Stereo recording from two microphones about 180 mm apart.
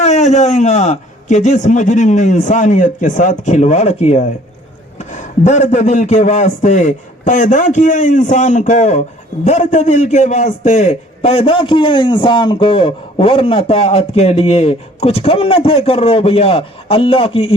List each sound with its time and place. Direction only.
0.0 s a man's voice: 40° left (ahead or behind)